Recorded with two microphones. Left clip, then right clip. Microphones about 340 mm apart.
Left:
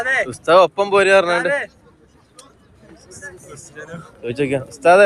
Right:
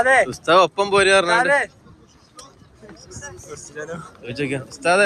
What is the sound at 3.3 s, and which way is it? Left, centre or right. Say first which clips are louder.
Speech: right 1 dB; centre.